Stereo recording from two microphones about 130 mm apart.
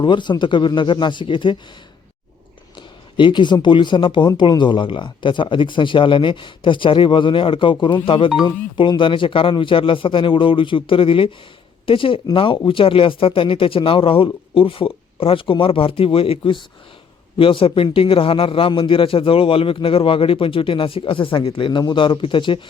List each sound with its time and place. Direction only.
0.0 s speech: 35° left (ahead or behind)
2.7 s a man's voice: 40° left (ahead or behind)